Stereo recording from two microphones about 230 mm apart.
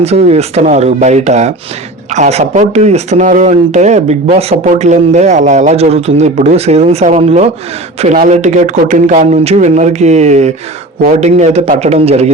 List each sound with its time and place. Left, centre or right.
0.0 s speech: right